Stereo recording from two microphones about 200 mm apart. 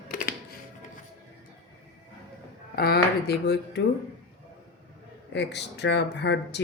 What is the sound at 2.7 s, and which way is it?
Speech, 50° left (ahead or behind).